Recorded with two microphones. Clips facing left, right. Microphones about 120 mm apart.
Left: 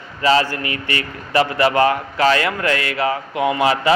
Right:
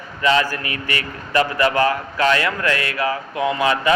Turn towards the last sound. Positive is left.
turn(degrees=20)  # may be behind; listen again after turning